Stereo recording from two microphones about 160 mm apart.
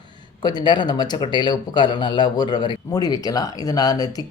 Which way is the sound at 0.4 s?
25° left (ahead or behind).